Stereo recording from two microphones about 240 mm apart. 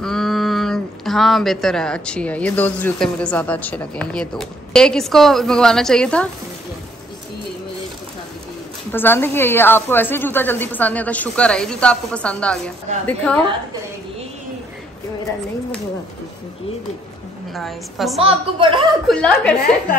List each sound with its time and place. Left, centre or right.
0.0 s speech: centre
8.9 s a woman's voice: centre
17.6 s speech: centre
18.2 s a woman's voice: right
19.0 s speech: centre